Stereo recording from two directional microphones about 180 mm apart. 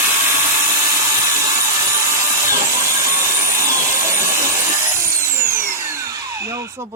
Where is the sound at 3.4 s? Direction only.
15° right (ahead or behind).